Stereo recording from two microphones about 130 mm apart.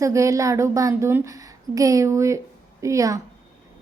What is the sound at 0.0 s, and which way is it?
A woman's voice, 25° right (ahead or behind).